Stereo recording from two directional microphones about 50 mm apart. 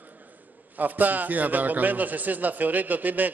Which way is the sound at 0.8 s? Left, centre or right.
Right.